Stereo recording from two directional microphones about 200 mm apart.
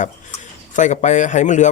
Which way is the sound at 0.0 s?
35° left (ahead or behind).